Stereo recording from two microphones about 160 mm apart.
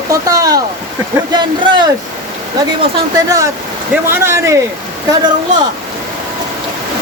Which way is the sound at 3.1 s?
20° right (ahead or behind).